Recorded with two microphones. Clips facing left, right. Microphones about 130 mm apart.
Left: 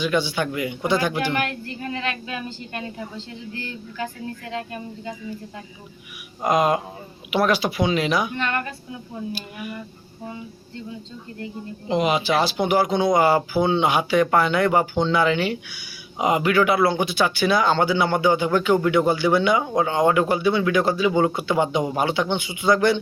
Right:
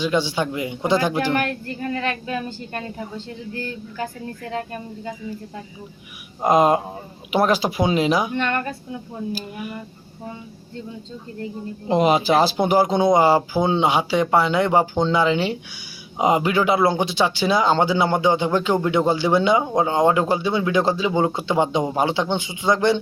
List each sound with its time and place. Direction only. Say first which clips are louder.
0.0 s speech: right 1 dB; 30° right (ahead or behind)
1.3 s a woman's voice: right 3 dB; 40° right (ahead or behind)
6.4 s speech: right 3 dB; 30° right (ahead or behind)
7.9 s speech: right 3 dB; 30° right (ahead or behind)
11.9 s speech: right 4 dB; 35° right (ahead or behind)